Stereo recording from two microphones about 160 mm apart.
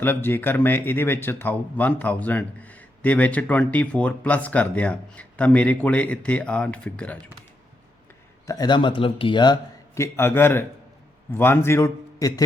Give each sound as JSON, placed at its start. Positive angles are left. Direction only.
{"t": 0.0, "sound": "speech", "side_deg": 15}
{"t": 8.4, "sound": "a man's voice", "side_deg": 25}